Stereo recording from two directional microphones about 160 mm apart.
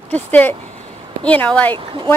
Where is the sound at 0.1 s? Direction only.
10° left (ahead or behind).